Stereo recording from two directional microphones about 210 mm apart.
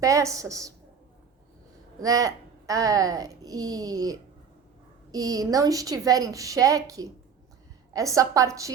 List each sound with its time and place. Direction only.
0.0 s a child's voice: 15° right (ahead or behind)
2.0 s a child's voice: 15° right (ahead or behind)